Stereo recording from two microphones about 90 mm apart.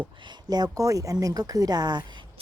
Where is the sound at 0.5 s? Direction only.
45° right (ahead or behind).